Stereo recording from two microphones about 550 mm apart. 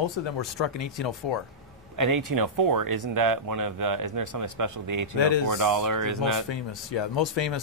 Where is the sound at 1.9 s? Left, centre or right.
Right.